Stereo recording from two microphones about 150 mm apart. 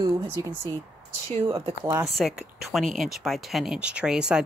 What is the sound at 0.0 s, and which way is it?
Speech, 25° right (ahead or behind).